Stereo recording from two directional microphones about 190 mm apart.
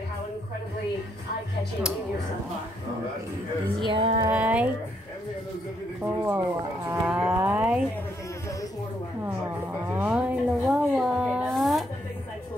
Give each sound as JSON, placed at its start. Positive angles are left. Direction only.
{"t": 3.8, "sound": "music", "side_deg": -30}
{"t": 4.3, "sound": "speech", "side_deg": -10}
{"t": 6.0, "sound": "speech", "side_deg": -10}
{"t": 6.9, "sound": "livestock", "side_deg": -10}
{"t": 9.8, "sound": "a sound", "side_deg": -5}